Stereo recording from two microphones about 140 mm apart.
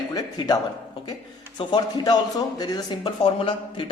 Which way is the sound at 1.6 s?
35° left (ahead or behind).